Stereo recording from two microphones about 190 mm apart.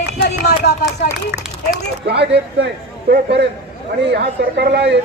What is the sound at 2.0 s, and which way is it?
Speech, 60° right (ahead or behind).